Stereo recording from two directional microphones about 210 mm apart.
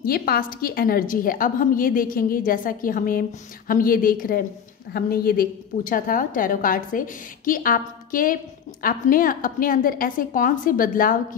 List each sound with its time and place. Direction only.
0.0 s a woman's voice: 45° left (ahead or behind)